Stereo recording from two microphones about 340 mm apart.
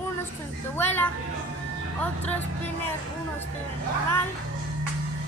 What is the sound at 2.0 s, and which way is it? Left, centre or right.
Speech, centre.